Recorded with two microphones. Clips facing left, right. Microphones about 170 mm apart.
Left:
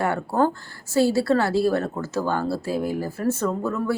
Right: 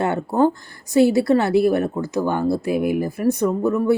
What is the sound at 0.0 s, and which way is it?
A woman's voice, 20° right (ahead or behind).